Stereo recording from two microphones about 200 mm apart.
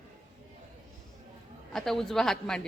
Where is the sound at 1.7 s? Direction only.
Centre (ahead or behind).